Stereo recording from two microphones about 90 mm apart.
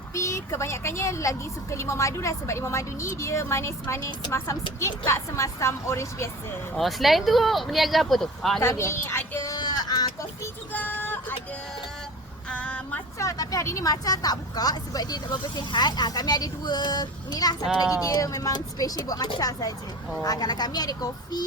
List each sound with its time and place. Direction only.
0.1 s speech: 35° left (ahead or behind)
6.7 s speech: centre (ahead or behind)
8.6 s speech: 30° left (ahead or behind)
9.6 s a sound: 50° left (ahead or behind)
10.7 s child singing: 20° left (ahead or behind)
12.5 s a sound: 15° left (ahead or behind)
13.1 s a woman's voice: 40° left (ahead or behind)